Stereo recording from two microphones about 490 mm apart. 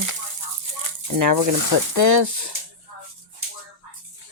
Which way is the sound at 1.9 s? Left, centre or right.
Right.